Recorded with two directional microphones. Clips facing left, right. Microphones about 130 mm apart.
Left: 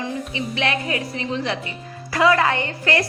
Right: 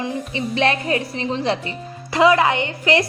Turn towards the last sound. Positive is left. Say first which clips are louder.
# right 3 dB
turn(degrees=-20)  # may be behind; listen again after turning